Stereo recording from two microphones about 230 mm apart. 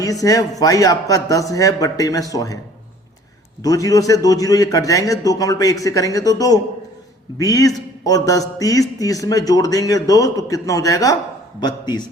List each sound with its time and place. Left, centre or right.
0.0 s speech: centre
3.6 s a man's voice: centre